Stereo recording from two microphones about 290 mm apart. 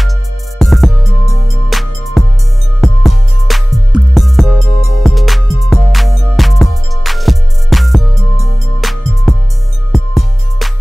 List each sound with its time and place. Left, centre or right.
0.6 s music: centre